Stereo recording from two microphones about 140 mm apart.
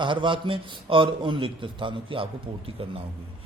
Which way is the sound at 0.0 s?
35° right (ahead or behind).